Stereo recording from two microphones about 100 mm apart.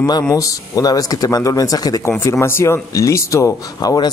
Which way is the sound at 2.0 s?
25° left (ahead or behind).